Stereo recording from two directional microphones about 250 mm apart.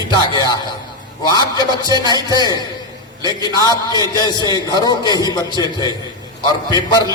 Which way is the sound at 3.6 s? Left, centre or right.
Centre.